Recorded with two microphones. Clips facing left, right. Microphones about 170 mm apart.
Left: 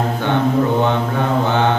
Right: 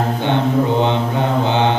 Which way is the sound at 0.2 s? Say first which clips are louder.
Left 1 dB; 20° right (ahead or behind).